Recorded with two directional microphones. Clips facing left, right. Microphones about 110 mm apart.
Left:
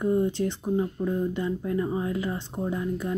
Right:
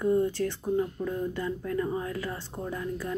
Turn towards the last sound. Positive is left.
turn(degrees=20)  # may be behind; listen again after turning